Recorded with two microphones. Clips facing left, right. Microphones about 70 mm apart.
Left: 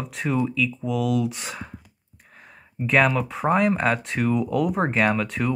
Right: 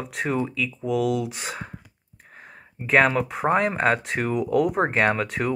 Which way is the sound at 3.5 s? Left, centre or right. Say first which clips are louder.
Left 2 dB; right.